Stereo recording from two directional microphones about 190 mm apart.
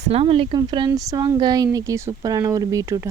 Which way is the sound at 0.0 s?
30° right (ahead or behind).